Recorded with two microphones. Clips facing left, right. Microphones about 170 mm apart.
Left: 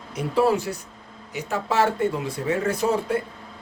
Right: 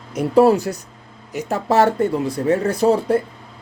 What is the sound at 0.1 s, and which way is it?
Speech, 40° right (ahead or behind).